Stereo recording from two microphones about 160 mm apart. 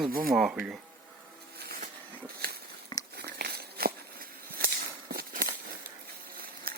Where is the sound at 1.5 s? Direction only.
75° right (ahead or behind).